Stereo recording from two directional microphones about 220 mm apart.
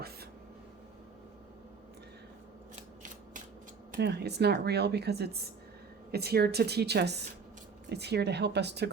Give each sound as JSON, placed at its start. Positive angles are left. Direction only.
{"t": 3.9, "sound": "a woman's voice", "side_deg": -50}